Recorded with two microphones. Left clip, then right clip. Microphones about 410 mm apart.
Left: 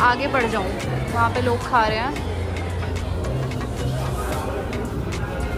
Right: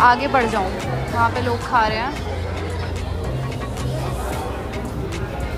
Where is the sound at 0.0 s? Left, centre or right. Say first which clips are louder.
Right 4 dB; centre.